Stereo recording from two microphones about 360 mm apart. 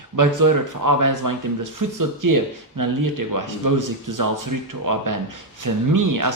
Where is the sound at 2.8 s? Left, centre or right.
Right.